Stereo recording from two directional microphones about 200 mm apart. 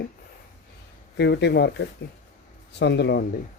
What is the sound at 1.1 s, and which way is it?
Speech, 60° left (ahead or behind).